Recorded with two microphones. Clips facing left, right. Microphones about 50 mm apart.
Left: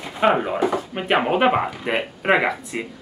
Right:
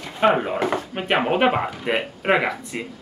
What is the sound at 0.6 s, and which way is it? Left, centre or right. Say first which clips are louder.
Drawer open or close: left 1 dB; right.